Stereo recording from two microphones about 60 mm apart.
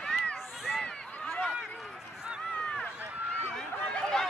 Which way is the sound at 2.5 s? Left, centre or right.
Centre.